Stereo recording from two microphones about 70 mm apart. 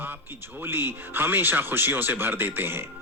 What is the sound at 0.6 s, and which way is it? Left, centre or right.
A man's voice, right.